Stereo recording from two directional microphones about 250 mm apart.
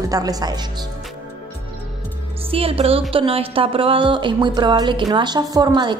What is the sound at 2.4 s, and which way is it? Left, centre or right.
A woman's voice, right.